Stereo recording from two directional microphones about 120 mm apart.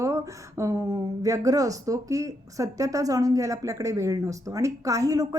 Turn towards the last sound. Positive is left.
turn(degrees=-30)  # may be behind; listen again after turning